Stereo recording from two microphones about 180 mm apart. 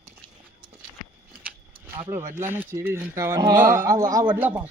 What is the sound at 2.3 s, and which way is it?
Speech, 15° right (ahead or behind).